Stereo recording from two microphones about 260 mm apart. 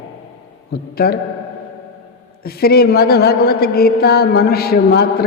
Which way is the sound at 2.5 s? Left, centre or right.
Left.